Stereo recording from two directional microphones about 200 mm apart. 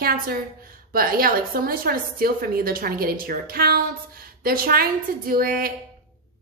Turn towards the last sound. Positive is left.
turn(degrees=-45)  # may be behind; listen again after turning